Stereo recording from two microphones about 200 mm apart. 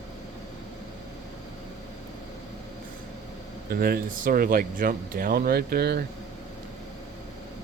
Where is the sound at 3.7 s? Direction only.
50° right (ahead or behind).